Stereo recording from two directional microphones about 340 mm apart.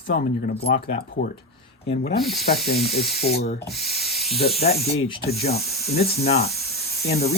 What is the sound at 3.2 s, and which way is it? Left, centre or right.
Speech, centre.